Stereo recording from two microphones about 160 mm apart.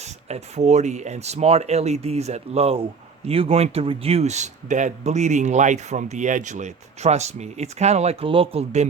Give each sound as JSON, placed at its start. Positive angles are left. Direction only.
{"t": 0.0, "sound": "speech", "side_deg": -45}